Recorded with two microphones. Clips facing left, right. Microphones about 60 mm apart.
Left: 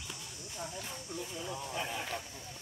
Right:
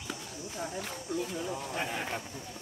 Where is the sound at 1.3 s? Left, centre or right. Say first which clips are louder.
Right 4 dB; right.